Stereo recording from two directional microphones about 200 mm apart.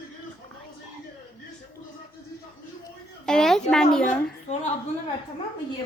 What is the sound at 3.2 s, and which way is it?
Speech, 5° left (ahead or behind).